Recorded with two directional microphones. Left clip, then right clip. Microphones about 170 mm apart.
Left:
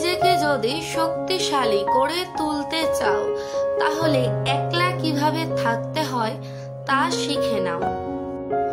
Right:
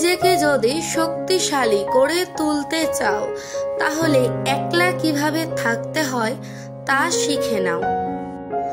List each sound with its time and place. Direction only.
0.0 s speech: 30° right (ahead or behind)